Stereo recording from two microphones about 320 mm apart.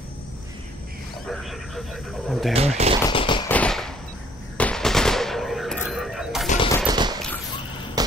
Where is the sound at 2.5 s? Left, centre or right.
Centre.